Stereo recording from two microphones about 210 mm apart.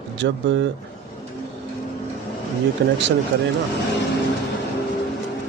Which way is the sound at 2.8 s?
55° right (ahead or behind).